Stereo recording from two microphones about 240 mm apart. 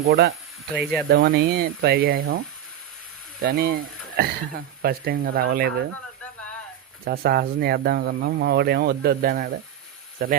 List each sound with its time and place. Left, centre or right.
0.0 s speech: right
0.8 s speech: centre
1.1 s speech: right
3.4 s speech: right
7.0 s speech: right